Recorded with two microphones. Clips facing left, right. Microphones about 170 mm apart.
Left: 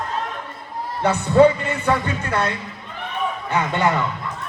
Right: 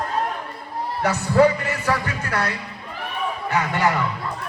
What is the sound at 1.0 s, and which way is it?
Speech, 25° left (ahead or behind).